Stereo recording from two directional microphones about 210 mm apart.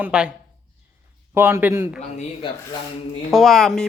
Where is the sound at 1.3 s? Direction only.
10° right (ahead or behind).